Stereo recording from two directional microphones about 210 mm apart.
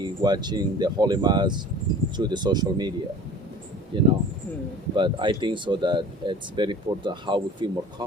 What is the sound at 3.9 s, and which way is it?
Speech, 20° right (ahead or behind).